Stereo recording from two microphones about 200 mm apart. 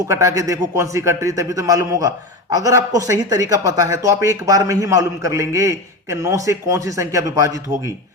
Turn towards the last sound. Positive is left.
turn(degrees=-15)  # may be behind; listen again after turning